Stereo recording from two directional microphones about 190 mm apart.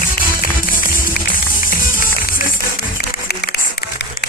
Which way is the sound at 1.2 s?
55° left (ahead or behind).